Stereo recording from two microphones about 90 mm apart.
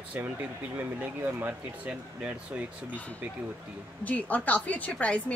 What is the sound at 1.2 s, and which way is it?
Speech, 20° right (ahead or behind).